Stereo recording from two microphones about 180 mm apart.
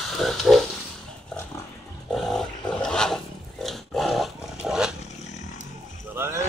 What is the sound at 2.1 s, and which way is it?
Dog, 5° left (ahead or behind).